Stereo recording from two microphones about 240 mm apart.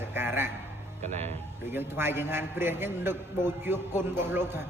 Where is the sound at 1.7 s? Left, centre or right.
Centre.